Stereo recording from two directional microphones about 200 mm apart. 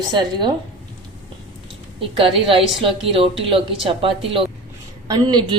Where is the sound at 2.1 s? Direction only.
25° right (ahead or behind).